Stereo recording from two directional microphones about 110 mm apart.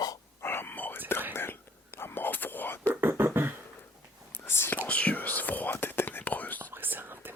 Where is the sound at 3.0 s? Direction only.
20° right (ahead or behind).